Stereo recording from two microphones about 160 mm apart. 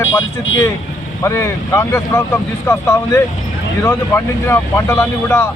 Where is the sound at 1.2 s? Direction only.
15° left (ahead or behind).